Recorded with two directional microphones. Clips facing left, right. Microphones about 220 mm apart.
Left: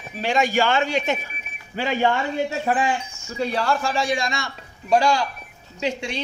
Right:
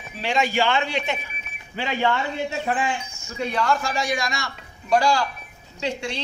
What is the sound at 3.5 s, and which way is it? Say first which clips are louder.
A man's voice: even; 30° left (ahead or behind).